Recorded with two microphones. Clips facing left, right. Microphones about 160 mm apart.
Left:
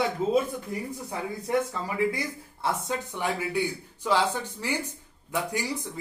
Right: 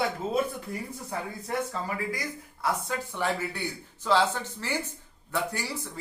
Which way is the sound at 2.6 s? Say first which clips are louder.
Left 1 dB; 20° left (ahead or behind).